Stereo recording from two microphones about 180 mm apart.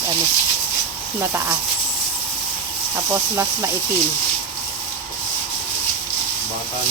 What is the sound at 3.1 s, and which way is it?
Speech, 15° right (ahead or behind).